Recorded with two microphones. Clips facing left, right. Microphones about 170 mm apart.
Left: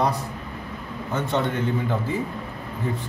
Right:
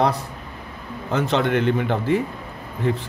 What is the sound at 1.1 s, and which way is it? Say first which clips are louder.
A man's voice: right 5 dB; 90° right.